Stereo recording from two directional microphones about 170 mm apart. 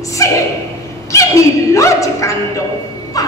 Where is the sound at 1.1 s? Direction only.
20° left (ahead or behind).